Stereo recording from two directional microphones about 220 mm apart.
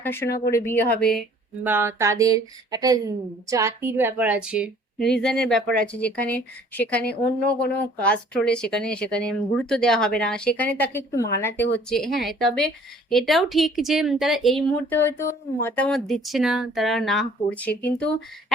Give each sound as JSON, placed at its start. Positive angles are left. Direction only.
{"t": 0.0, "sound": "speech", "side_deg": 10}
{"t": 0.3, "sound": "speech", "side_deg": 45}
{"t": 0.5, "sound": "a woman's voice", "side_deg": 10}
{"t": 1.6, "sound": "a woman's voice", "side_deg": -10}
{"t": 11.9, "sound": "a woman's voice", "side_deg": 0}